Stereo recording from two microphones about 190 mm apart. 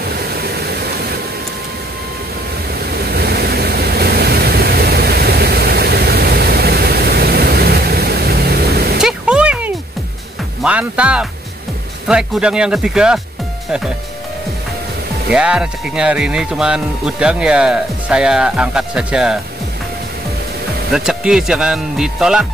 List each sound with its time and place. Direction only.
0.2 s vehicle: 55° right (ahead or behind)
2.7 s waves: 55° right (ahead or behind)
9.0 s a sound: 5° right (ahead or behind)
10.6 s speech: 5° right (ahead or behind)
15.3 s speech: 5° right (ahead or behind)
20.9 s speech: 5° right (ahead or behind)